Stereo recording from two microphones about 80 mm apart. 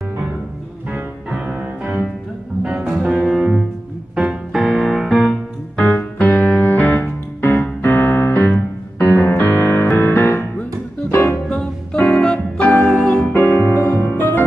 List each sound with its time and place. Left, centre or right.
2.6 s music: centre
5.8 s music: centre; by 11.3 s left
11.4 s music: centre
13.3 s music: left